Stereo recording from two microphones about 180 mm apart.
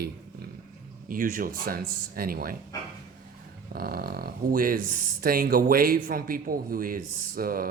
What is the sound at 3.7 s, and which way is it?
Speech, 55° right (ahead or behind).